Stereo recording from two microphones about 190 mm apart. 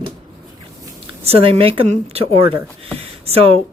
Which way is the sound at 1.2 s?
30° right (ahead or behind).